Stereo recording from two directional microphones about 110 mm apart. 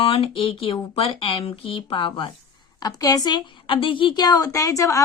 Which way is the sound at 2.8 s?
35° left (ahead or behind).